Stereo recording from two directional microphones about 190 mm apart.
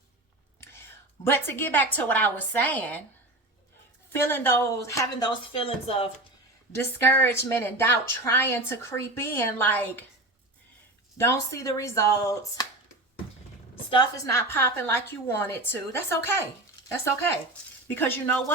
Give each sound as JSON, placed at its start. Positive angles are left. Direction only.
{"t": 1.2, "sound": "speech", "side_deg": 10}
{"t": 4.1, "sound": "speech", "side_deg": 10}
{"t": 5.5, "sound": "speech", "side_deg": 30}
{"t": 6.7, "sound": "speech", "side_deg": 10}
{"t": 11.2, "sound": "speech", "side_deg": 15}
{"t": 13.9, "sound": "speech", "side_deg": 15}
{"t": 17.9, "sound": "speech", "side_deg": 10}